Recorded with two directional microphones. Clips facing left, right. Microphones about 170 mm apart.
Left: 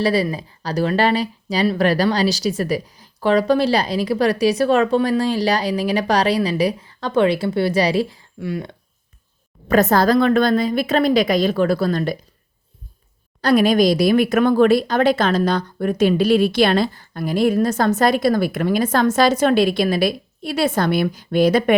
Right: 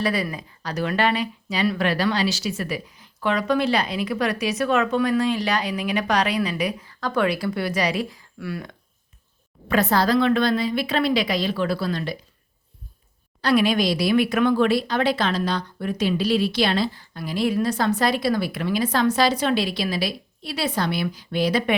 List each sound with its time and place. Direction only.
0.0 s speech: 30° left (ahead or behind)
9.6 s speech: 45° left (ahead or behind)
13.4 s speech: 45° left (ahead or behind)